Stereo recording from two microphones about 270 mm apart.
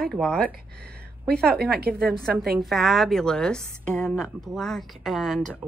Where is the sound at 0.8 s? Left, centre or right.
Right.